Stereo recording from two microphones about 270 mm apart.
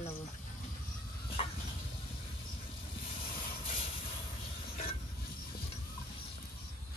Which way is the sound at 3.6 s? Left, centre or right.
Centre.